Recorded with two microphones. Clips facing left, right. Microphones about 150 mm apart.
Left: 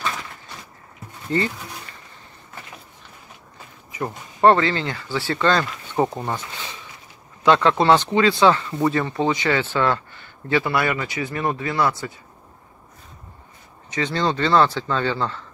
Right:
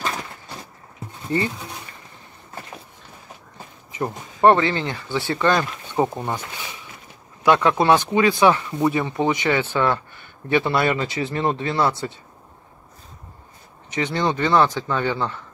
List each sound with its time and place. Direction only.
1.3 s speech: 15° right (ahead or behind)
3.9 s speech: 15° right (ahead or behind)
6.0 s speech: centre (ahead or behind)
6.3 s a sound: 15° right (ahead or behind)
7.4 s speech: 15° right (ahead or behind)
13.9 s speech: 15° right (ahead or behind)